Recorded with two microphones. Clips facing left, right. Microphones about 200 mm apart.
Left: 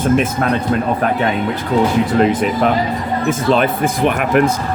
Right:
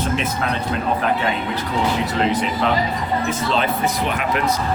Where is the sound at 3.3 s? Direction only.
55° left (ahead or behind).